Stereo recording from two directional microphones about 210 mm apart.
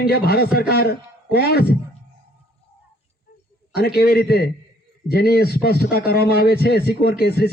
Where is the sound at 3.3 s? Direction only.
45° left (ahead or behind).